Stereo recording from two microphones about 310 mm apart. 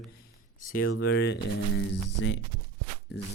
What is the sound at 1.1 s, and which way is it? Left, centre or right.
Speech, left.